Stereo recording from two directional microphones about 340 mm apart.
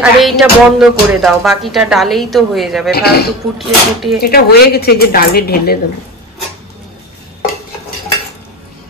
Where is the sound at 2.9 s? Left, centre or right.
Left.